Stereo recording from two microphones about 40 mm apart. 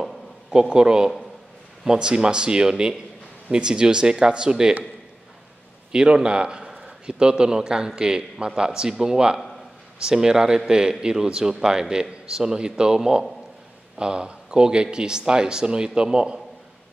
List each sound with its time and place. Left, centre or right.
0.0 s a sound: centre
1.9 s a man's voice: right
5.9 s a man's voice: right